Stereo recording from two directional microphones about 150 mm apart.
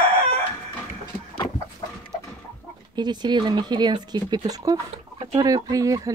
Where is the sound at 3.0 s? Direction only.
30° right (ahead or behind).